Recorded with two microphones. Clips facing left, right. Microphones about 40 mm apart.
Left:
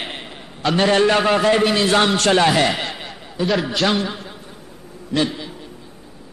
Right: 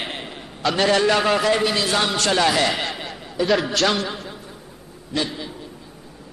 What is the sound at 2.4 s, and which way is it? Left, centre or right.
Speech, left.